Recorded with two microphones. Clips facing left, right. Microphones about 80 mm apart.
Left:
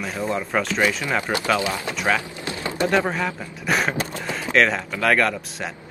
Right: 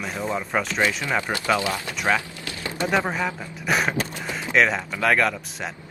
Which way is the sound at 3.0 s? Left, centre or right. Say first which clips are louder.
Right 1 dB; centre.